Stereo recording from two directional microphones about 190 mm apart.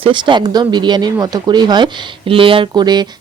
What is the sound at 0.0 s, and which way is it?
Speech, 25° right (ahead or behind).